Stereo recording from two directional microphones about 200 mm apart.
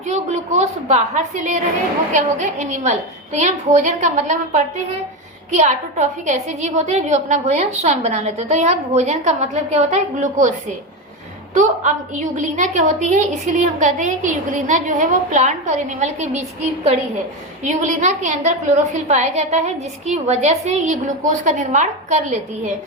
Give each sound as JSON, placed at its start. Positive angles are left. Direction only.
{"t": 0.0, "sound": "a woman's voice", "side_deg": -35}
{"t": 11.5, "sound": "a woman's voice", "side_deg": -35}
{"t": 17.6, "sound": "a woman's voice", "side_deg": -35}